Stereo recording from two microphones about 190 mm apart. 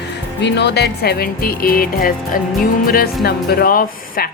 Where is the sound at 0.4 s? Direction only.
60° left (ahead or behind).